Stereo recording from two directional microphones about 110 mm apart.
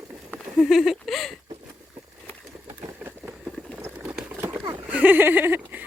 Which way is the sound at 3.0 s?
10° right (ahead or behind).